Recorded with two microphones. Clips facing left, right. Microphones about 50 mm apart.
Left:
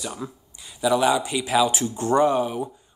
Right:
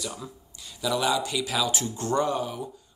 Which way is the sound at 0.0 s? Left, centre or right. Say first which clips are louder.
Left 4 dB; left.